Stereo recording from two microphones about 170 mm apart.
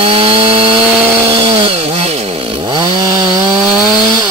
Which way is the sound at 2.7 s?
25° right (ahead or behind).